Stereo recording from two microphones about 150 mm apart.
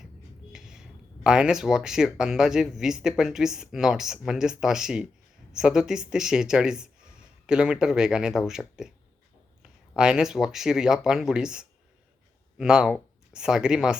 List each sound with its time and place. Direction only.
0.5 s speech: 5° right (ahead or behind)